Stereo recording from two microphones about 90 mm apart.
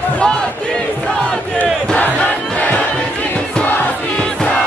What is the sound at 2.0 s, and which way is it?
Crowd, 20° left (ahead or behind).